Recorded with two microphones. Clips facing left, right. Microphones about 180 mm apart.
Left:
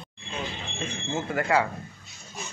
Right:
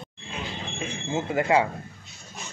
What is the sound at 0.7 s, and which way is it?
Speech, 20° right (ahead or behind).